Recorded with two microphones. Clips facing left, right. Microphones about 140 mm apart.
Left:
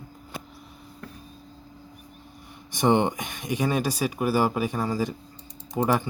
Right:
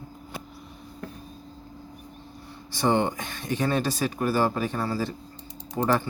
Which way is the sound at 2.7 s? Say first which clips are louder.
Left 2 dB; 20° left (ahead or behind).